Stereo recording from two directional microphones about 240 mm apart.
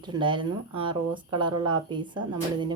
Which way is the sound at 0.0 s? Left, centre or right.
Centre.